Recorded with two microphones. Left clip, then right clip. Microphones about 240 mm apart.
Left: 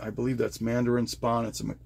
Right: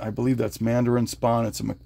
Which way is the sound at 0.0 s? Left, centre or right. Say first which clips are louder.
Right 4 dB; right.